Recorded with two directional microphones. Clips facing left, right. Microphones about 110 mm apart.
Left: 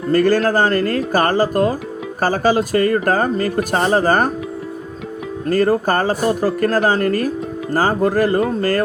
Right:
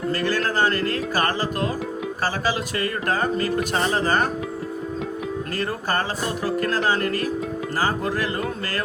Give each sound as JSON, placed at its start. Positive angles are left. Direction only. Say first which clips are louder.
{"t": 0.1, "sound": "speech", "louder": "left 11 dB", "side_deg": 45}
{"t": 5.5, "sound": "speech", "louder": "left 14 dB", "side_deg": 45}